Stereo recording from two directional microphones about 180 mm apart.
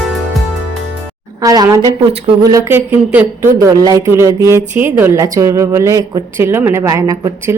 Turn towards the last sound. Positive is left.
turn(degrees=-20)  # may be behind; listen again after turning